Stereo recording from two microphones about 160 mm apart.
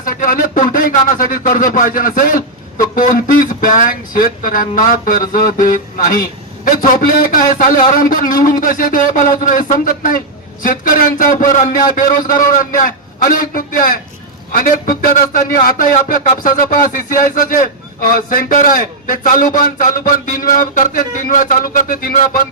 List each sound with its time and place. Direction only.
0.0 s speech: 60° left (ahead or behind)